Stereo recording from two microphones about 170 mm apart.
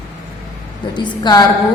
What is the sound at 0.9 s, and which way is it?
Speech, 25° left (ahead or behind).